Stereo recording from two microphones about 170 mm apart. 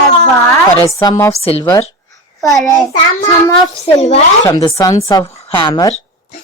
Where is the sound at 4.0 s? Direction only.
40° left (ahead or behind).